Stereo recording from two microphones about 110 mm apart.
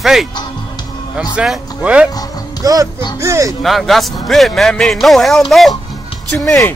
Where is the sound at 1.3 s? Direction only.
10° right (ahead or behind).